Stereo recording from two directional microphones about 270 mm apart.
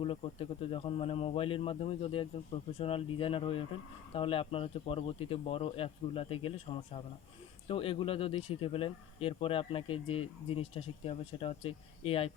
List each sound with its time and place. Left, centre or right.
0.0 s speech: left